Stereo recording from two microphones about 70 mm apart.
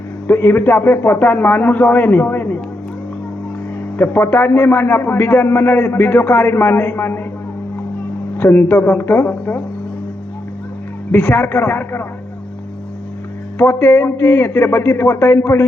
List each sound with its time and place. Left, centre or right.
0.3 s a man's voice: left
3.9 s a man's voice: left
8.4 s a man's voice: left
11.1 s a man's voice: left
13.6 s a man's voice: left